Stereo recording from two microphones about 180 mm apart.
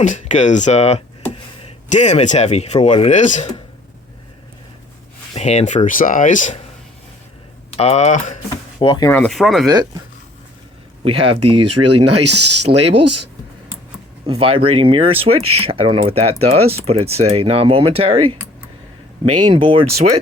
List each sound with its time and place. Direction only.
0.0 s speech: 45° left (ahead or behind)
5.3 s speech: 35° left (ahead or behind)
7.7 s speech: 35° left (ahead or behind)
8.4 s speech: 25° left (ahead or behind)
9.0 s speech: 10° left (ahead or behind)
9.3 s speech: centre (ahead or behind)
9.6 s speech: 20° right (ahead or behind)
11.0 s speech: 30° right (ahead or behind)
12.7 s speech: 45° right (ahead or behind)
14.3 s speech: 30° right (ahead or behind)